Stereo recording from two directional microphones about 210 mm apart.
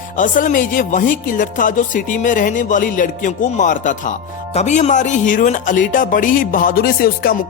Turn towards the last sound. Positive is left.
turn(degrees=45)  # may be behind; listen again after turning